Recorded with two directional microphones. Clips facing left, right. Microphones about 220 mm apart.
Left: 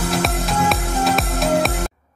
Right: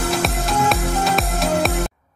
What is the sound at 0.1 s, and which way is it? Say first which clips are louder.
Music: even; centre (ahead or behind).